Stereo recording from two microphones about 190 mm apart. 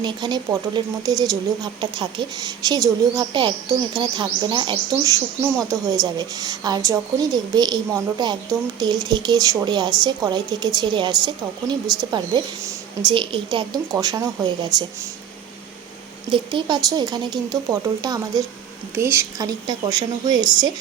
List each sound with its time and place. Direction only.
0.0 s speech: 25° right (ahead or behind)
16.3 s speech: 25° right (ahead or behind)